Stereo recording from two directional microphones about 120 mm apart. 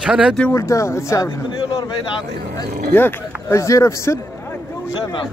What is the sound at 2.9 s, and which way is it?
Speech, 20° left (ahead or behind).